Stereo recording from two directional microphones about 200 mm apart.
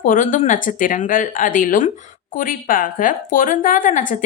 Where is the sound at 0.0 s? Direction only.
40° left (ahead or behind).